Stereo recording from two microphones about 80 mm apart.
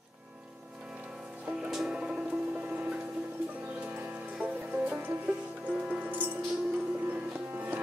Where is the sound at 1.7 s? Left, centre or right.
Centre.